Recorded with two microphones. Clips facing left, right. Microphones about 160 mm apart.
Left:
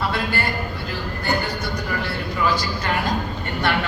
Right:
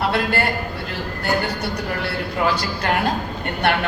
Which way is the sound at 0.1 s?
65° right (ahead or behind).